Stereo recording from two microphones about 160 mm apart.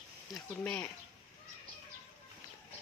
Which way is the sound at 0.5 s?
10° left (ahead or behind).